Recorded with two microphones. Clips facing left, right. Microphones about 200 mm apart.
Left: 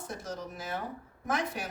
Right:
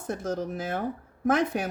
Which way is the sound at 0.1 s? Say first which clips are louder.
Right 11 dB; 50° right (ahead or behind).